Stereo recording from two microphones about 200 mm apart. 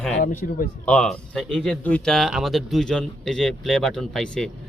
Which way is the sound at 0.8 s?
5° left (ahead or behind).